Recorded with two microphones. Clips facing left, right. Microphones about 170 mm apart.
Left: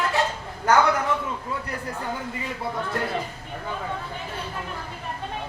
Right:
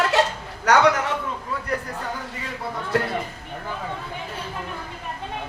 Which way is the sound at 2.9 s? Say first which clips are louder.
Right 7 dB; 85° right.